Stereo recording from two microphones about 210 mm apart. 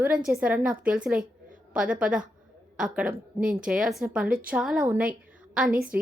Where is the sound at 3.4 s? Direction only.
40° right (ahead or behind).